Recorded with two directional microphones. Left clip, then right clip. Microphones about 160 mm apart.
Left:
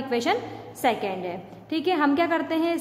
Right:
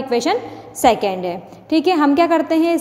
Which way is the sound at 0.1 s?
25° right (ahead or behind).